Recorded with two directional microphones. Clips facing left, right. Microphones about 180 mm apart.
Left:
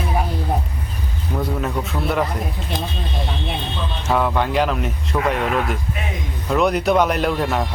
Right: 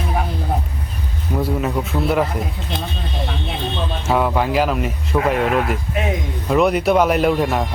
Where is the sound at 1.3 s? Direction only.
5° right (ahead or behind).